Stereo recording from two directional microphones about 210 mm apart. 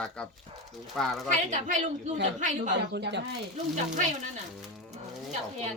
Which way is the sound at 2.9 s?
55° right (ahead or behind).